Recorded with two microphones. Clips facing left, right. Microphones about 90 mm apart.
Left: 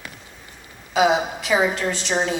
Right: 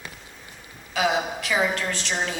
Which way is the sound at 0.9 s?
20° left (ahead or behind).